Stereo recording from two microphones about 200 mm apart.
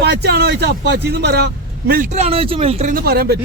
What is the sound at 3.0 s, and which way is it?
Speech, 50° right (ahead or behind).